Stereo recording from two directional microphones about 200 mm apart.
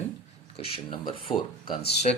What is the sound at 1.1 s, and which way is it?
Speech, 25° left (ahead or behind).